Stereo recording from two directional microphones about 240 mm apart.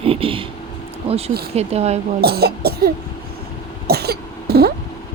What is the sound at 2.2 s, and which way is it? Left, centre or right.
Speech, right.